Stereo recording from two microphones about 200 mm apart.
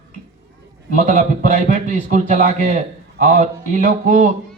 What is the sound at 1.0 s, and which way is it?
A man's voice, 35° right (ahead or behind).